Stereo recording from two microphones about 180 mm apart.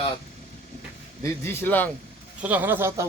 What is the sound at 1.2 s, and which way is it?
Speech, 15° left (ahead or behind).